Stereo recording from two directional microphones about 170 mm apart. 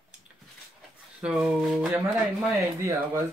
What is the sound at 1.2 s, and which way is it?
Speech, 5° right (ahead or behind).